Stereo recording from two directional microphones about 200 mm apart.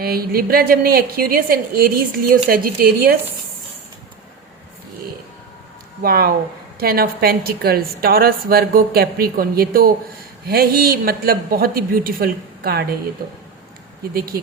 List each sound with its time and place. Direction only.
0.0 s a woman's voice: 50° right (ahead or behind)
6.0 s a woman's voice: 50° right (ahead or behind)
14.1 s a woman's voice: 50° right (ahead or behind)